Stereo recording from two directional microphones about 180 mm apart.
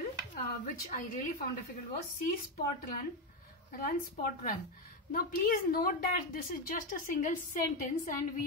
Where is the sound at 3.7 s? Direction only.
55° left (ahead or behind).